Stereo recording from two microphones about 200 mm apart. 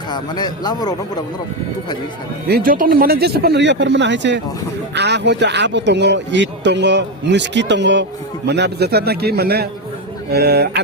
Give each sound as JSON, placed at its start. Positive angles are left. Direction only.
{"t": 0.1, "sound": "a man's voice", "side_deg": 20}
{"t": 2.5, "sound": "a man's voice", "side_deg": -45}